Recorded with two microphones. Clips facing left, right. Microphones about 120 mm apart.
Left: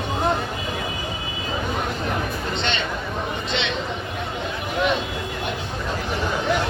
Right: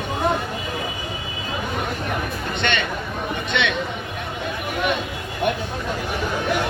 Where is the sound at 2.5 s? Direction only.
55° right (ahead or behind).